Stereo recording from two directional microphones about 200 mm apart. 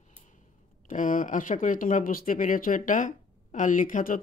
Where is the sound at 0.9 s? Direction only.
40° left (ahead or behind).